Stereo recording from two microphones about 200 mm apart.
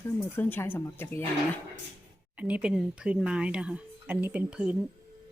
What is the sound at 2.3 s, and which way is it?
Speech, 5° right (ahead or behind).